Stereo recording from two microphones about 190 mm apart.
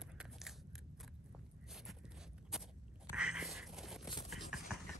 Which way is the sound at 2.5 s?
Centre (ahead or behind).